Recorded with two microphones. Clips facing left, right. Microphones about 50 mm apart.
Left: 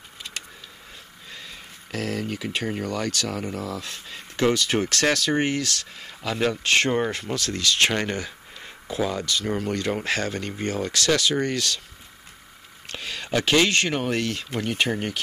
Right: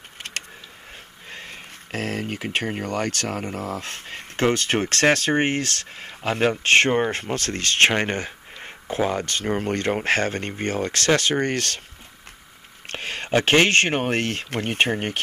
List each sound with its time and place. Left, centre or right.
0.2 s a sound: right
1.3 s speech: right
12.8 s speech: right